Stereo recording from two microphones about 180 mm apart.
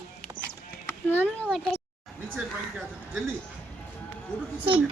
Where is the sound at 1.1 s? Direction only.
10° left (ahead or behind).